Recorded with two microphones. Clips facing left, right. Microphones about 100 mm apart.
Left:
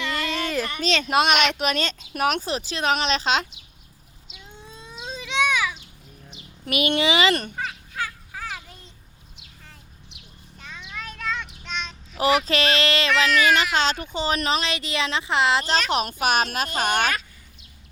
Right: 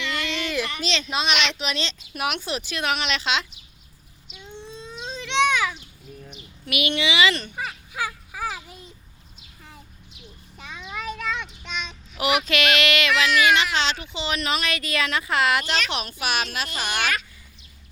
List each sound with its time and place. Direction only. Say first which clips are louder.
0.0 s a child's voice: left 2 dB; 40° left (ahead or behind)
4.4 s a sound: right 5 dB; 5° left (ahead or behind)
6.7 s speech: left 3 dB; 40° left (ahead or behind)
7.5 s children playing: left 1 dB; 15° right (ahead or behind)
10.6 s a sound: right 3 dB; 5° right (ahead or behind)
11.6 s child singing: left 1 dB; 5° right (ahead or behind)
12.1 s speech: left 2 dB; 35° left (ahead or behind)